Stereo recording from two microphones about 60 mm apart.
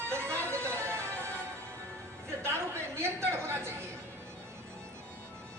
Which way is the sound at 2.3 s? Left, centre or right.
Right.